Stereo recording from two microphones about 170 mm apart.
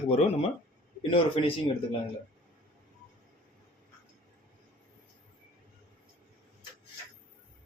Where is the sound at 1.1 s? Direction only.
30° left (ahead or behind).